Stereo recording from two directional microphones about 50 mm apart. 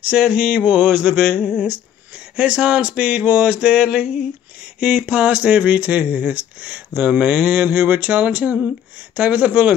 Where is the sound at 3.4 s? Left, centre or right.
Centre.